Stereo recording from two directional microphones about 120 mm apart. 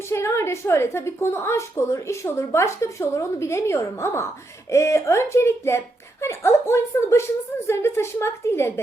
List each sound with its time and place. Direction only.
0.1 s a woman's voice: 20° left (ahead or behind)